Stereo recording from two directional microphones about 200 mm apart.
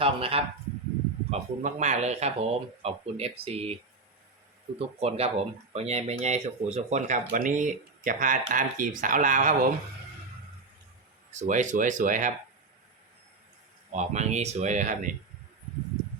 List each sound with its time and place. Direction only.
0.0 s a man's voice: 30° right (ahead or behind)
4.8 s speech: 30° right (ahead or behind)
11.3 s speech: 35° right (ahead or behind)
13.9 s speech: 35° right (ahead or behind)